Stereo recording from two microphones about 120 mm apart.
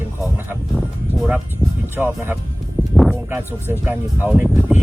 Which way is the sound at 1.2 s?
10° right (ahead or behind).